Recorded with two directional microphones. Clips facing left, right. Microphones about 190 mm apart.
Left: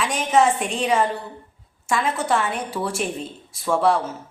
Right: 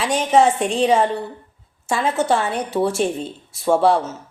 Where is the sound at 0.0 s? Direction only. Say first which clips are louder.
Right 3 dB; 30° right (ahead or behind).